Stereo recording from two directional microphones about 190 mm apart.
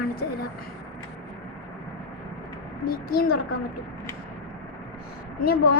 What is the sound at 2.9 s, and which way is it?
Speech, 55° left (ahead or behind).